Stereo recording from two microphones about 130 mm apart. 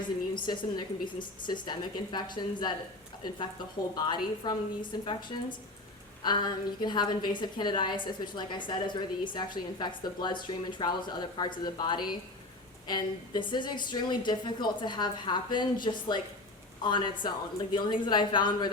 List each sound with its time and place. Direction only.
0.0 s a woman's voice: 35° left (ahead or behind)
3.9 s a woman's voice: 35° left (ahead or behind)